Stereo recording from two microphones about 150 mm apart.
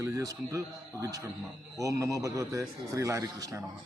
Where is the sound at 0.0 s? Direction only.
20° right (ahead or behind).